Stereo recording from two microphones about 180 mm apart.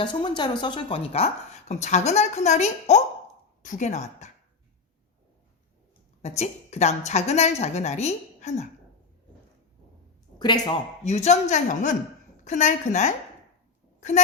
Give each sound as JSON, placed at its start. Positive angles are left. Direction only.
{"t": 0.0, "sound": "speech", "side_deg": 25}
{"t": 6.2, "sound": "speech", "side_deg": 40}
{"t": 10.3, "sound": "speech", "side_deg": 25}
{"t": 11.0, "sound": "speech", "side_deg": 40}